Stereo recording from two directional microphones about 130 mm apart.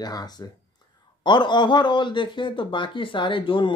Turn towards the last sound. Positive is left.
turn(degrees=40)  # may be behind; listen again after turning